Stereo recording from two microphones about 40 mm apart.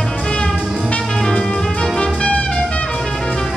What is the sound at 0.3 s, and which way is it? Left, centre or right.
Music, left.